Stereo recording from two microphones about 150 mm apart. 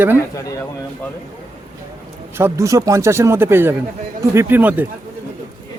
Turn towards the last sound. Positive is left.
turn(degrees=-10)  # may be behind; listen again after turning